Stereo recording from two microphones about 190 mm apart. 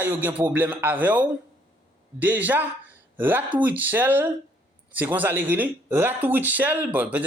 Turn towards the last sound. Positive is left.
turn(degrees=-10)  # may be behind; listen again after turning